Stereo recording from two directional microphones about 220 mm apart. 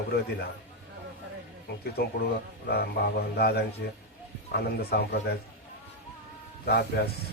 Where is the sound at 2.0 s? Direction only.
45° left (ahead or behind).